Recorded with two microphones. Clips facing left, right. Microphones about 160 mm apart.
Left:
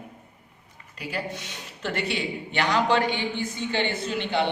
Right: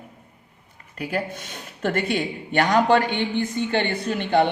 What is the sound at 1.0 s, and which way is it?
Speech, 50° right (ahead or behind).